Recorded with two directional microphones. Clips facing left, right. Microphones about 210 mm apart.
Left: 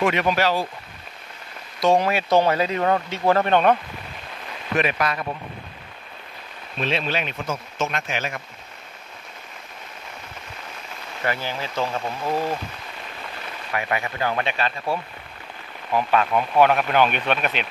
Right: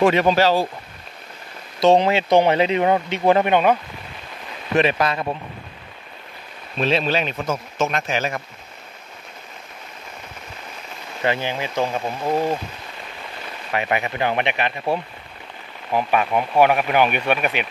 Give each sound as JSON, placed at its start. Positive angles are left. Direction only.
{"t": 0.0, "sound": "speech", "side_deg": -30}
{"t": 1.8, "sound": "speech", "side_deg": -25}
{"t": 4.7, "sound": "speech", "side_deg": -30}
{"t": 6.8, "sound": "speech", "side_deg": -35}
{"t": 11.2, "sound": "speech", "side_deg": -20}
{"t": 13.7, "sound": "speech", "side_deg": -20}